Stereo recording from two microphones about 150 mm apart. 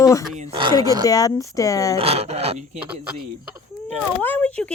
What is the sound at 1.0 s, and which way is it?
Speech, 25° left (ahead or behind).